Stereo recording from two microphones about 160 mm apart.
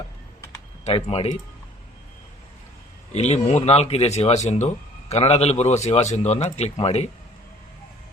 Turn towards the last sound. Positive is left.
turn(degrees=40)  # may be behind; listen again after turning